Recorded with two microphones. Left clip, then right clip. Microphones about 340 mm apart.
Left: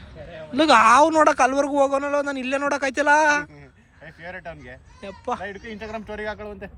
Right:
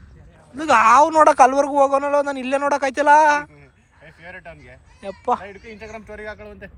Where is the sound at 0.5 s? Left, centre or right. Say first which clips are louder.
Right 1 dB; centre.